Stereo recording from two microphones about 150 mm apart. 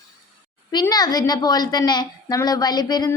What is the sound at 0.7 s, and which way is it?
A woman's voice, 25° left (ahead or behind).